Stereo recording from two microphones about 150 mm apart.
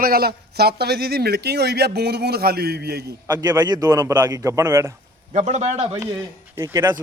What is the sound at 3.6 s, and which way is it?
Speech, 25° right (ahead or behind).